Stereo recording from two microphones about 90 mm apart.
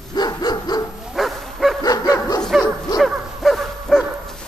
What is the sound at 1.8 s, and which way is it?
Dog, 45° left (ahead or behind).